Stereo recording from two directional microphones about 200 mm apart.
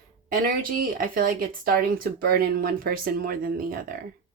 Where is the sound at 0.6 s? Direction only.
45° right (ahead or behind).